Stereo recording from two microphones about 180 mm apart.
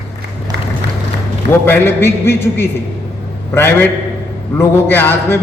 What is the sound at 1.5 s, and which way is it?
A man's voice, 10° left (ahead or behind).